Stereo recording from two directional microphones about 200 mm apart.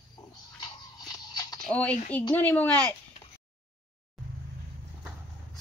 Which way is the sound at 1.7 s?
5° left (ahead or behind).